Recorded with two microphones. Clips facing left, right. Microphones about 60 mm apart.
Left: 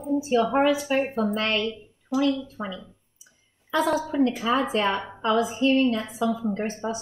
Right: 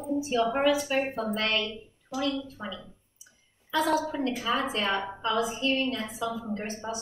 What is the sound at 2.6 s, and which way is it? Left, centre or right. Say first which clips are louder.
Speech: left 5 dB; left.